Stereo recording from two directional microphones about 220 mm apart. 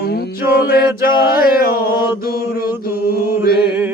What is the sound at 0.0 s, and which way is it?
Mantra, 45° left (ahead or behind).